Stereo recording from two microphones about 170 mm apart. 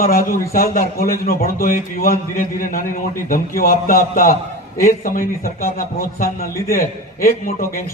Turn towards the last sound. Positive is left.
turn(degrees=55)  # may be behind; listen again after turning